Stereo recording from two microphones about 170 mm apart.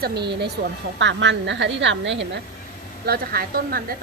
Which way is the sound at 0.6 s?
90° right.